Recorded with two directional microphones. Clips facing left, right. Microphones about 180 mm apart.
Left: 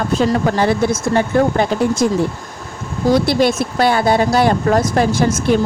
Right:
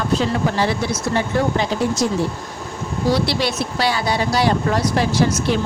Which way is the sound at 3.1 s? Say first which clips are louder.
Left 6 dB; 50° left (ahead or behind).